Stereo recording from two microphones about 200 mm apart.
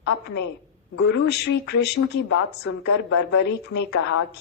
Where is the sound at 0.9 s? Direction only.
60° left (ahead or behind).